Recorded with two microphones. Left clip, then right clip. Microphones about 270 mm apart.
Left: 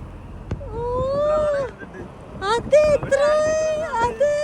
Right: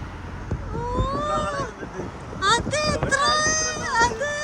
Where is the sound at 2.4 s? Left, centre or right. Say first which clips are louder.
Left 5 dB; centre.